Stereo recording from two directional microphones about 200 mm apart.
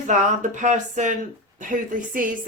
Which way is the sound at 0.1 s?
40° right (ahead or behind).